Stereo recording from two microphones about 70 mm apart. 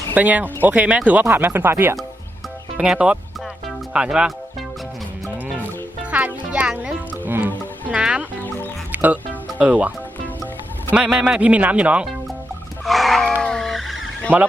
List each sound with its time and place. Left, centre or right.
0.1 s speech: right
2.7 s speech: centre
5.5 s music: centre
7.9 s speech: centre
8.9 s music: right
9.6 s speech: centre
10.9 s speech: centre
12.8 s a sound: centre
13.4 s vehicle: centre